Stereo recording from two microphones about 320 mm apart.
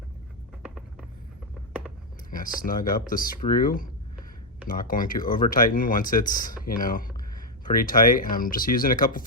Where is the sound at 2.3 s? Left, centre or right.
Left.